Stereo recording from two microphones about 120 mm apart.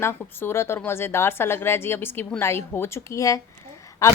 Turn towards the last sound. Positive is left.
turn(degrees=30)  # may be behind; listen again after turning